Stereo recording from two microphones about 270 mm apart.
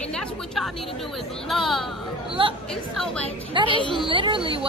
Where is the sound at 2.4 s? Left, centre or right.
Centre.